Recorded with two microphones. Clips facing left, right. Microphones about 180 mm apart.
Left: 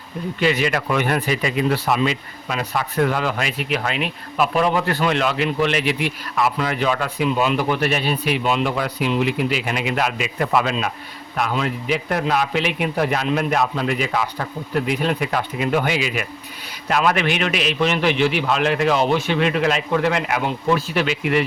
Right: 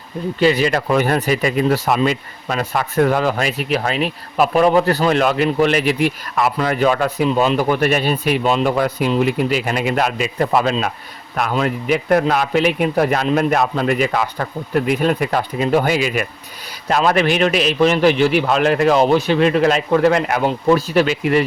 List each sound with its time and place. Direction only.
0.3 s speech: 35° right (ahead or behind)
11.3 s a man's voice: 50° right (ahead or behind)